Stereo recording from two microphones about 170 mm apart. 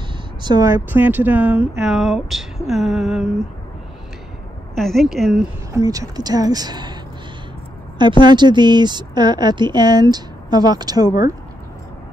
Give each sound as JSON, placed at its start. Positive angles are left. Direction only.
{"t": 0.4, "sound": "a woman's voice", "side_deg": -25}
{"t": 4.7, "sound": "a woman's voice", "side_deg": 0}
{"t": 5.7, "sound": "speech", "side_deg": -20}
{"t": 8.2, "sound": "speech", "side_deg": -25}